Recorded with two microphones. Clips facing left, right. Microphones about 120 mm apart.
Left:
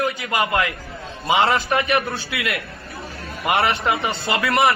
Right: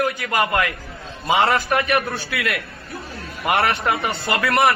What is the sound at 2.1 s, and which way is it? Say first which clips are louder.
A man's voice: right 1 dB; 25° left (ahead or behind).